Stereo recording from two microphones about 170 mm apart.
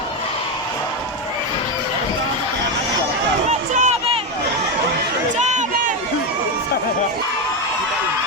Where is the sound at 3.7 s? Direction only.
40° right (ahead or behind).